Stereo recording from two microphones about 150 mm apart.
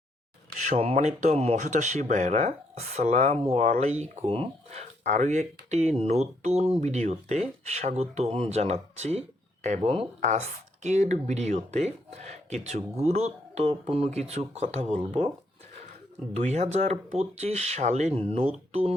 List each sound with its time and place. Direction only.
0.9 s speech: 45° right (ahead or behind)
16.3 s speech: 50° right (ahead or behind)